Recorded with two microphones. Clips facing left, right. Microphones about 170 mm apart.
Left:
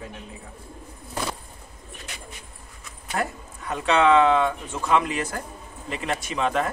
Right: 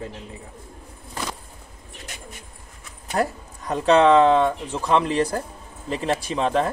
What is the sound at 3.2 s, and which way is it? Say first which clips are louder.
Speech: right 5 dB; 35° right (ahead or behind).